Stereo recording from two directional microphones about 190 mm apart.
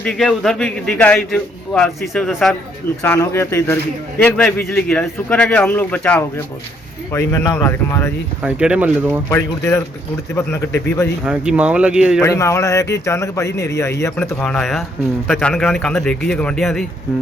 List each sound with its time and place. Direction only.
0.0 s a man's voice: 5° left (ahead or behind)
3.0 s a man's voice: 15° left (ahead or behind)
8.4 s speech: 5° right (ahead or behind)
9.3 s a man's voice: 15° left (ahead or behind)
11.2 s speech: 5° right (ahead or behind)
12.2 s a man's voice: 15° left (ahead or behind)